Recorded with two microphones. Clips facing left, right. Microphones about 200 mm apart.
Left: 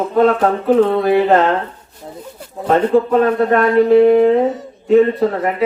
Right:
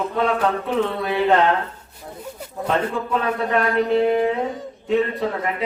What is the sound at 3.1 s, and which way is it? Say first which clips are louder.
Speech: left 9 dB; 45° left (ahead or behind).